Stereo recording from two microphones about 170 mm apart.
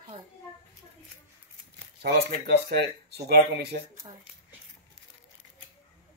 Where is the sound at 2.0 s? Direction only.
70° right (ahead or behind).